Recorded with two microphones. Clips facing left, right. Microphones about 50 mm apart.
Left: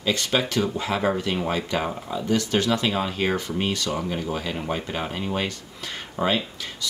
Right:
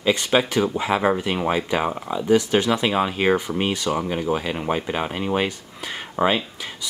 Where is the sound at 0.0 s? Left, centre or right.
Centre.